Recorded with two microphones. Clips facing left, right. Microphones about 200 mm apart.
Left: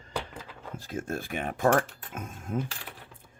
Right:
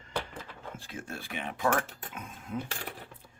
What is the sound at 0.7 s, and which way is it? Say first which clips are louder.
Speech: left 9 dB; 40° left (ahead or behind).